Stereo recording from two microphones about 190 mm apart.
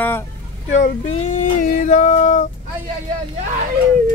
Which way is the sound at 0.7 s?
35° left (ahead or behind).